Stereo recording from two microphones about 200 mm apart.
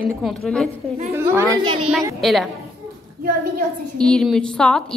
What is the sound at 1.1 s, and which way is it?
Speech, 15° right (ahead or behind).